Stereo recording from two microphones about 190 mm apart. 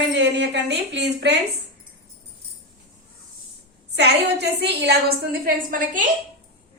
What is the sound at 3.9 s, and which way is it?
A woman's voice, 60° right (ahead or behind).